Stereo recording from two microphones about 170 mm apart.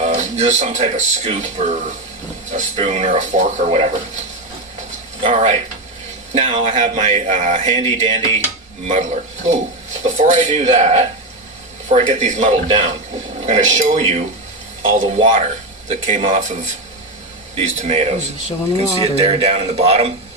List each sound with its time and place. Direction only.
0.0 s music: 40° right (ahead or behind)
0.6 s speech: 45° right (ahead or behind)
5.2 s speech: 35° right (ahead or behind)
15.2 s speech: 35° right (ahead or behind)